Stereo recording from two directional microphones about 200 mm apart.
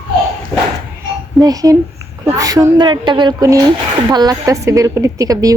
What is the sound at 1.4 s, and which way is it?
A woman's voice, 15° right (ahead or behind).